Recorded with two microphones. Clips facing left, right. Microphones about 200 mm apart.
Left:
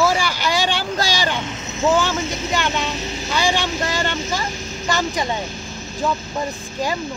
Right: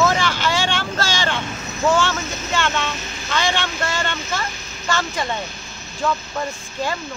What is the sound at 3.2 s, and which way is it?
Speech, 15° left (ahead or behind).